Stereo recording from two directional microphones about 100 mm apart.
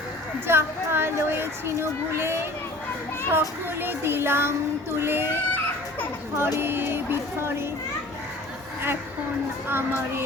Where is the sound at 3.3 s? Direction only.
20° right (ahead or behind).